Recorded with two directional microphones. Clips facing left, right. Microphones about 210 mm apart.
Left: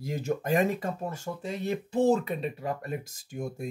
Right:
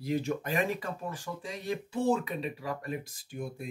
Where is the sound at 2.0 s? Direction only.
40° left (ahead or behind).